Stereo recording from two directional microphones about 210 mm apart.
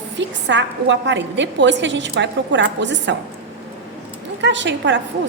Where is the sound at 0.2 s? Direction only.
60° right (ahead or behind).